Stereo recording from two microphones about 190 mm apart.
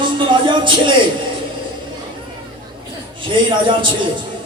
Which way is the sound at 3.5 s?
25° right (ahead or behind).